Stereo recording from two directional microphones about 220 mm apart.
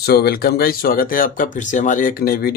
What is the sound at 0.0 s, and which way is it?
Speech, 45° left (ahead or behind).